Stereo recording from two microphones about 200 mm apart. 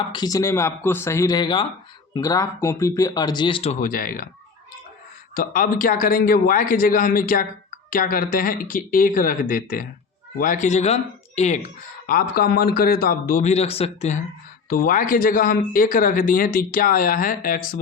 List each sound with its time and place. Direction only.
0.1 s speech: 20° left (ahead or behind); by 4.3 s 45° left (ahead or behind)
5.3 s a man's voice: 45° left (ahead or behind)
14.7 s a man's voice: 45° left (ahead or behind)